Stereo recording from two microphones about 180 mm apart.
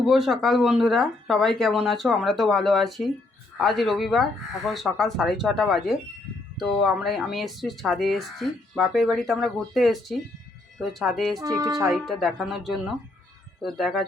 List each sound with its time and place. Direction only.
0.0 s speech: centre (ahead or behind)
11.3 s speech: 20° right (ahead or behind)
11.9 s speech: centre (ahead or behind)